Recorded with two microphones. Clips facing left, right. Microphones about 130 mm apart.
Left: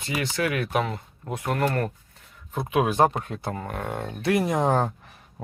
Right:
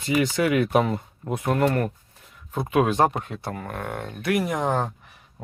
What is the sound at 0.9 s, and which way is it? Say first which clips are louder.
Speech: right 4 dB; 15° right (ahead or behind).